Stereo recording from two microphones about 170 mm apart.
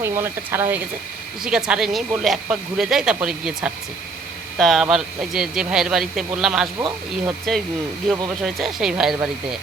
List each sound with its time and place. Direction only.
0.0 s speech: 15° right (ahead or behind)
6.7 s speech: 20° right (ahead or behind)
8.5 s speech: centre (ahead or behind)